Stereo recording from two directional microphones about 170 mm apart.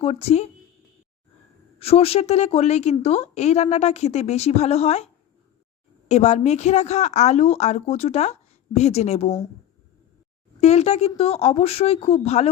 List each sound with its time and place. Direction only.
0.0 s a woman's voice: 35° left (ahead or behind)
1.8 s a woman's voice: 35° left (ahead or behind)
6.1 s a woman's voice: 40° left (ahead or behind)
10.6 s a woman's voice: 40° left (ahead or behind)